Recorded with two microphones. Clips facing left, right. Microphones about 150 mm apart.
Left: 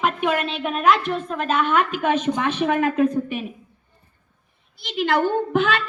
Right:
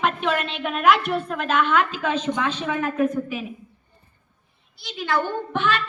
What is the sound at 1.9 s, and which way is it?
Speech, 55° left (ahead or behind).